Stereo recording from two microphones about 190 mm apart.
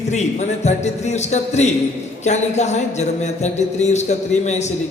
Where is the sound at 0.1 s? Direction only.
35° left (ahead or behind).